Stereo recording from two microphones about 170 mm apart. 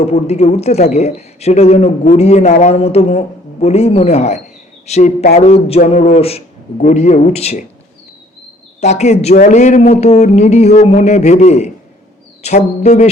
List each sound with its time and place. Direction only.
0.0 s speech: 40° left (ahead or behind)
8.8 s speech: 40° left (ahead or behind)